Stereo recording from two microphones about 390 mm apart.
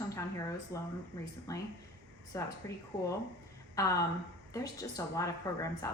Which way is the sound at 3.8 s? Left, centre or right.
Centre.